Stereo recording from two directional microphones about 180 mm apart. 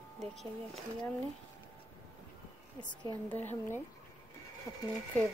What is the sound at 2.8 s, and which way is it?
Speech, 25° left (ahead or behind).